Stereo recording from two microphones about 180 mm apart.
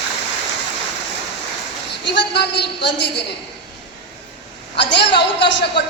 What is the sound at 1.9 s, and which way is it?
A woman's voice, 70° left (ahead or behind).